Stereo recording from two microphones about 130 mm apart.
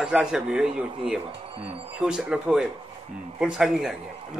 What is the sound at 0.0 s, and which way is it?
Speech, 5° right (ahead or behind).